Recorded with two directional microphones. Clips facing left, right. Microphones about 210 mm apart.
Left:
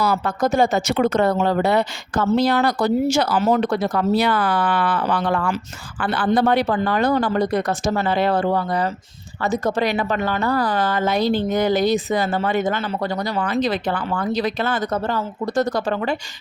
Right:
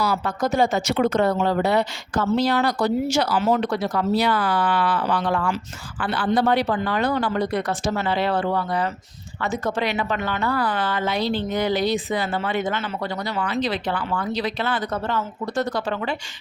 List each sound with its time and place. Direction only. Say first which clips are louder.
0.0 s speech: left 3 dB; 55° left (ahead or behind)